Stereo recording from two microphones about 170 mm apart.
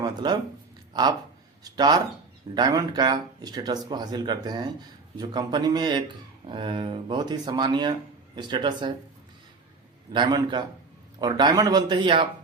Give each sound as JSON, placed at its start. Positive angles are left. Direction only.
{"t": 0.0, "sound": "a sound", "side_deg": -25}
{"t": 1.6, "sound": "speech", "side_deg": -25}
{"t": 10.1, "sound": "speech", "side_deg": -25}